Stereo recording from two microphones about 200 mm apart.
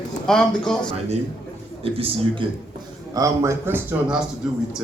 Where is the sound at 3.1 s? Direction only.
15° right (ahead or behind).